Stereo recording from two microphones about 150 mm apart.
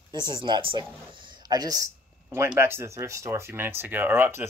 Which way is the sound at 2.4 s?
15° right (ahead or behind).